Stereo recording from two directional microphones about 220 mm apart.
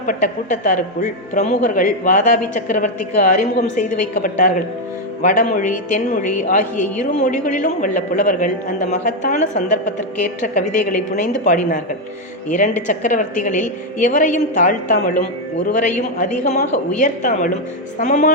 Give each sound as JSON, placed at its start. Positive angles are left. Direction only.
{"t": 0.0, "sound": "speech", "side_deg": 35}